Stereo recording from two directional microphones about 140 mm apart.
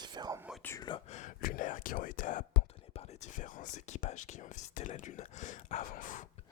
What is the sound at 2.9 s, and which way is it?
Speech, 50° left (ahead or behind).